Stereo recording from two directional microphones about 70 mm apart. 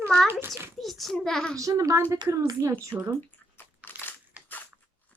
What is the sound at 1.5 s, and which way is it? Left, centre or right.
Speech, right.